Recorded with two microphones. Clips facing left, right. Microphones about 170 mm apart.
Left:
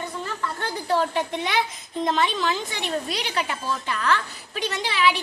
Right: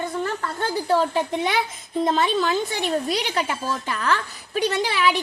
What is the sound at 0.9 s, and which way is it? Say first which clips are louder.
Speech: right 2 dB; 35° right (ahead or behind).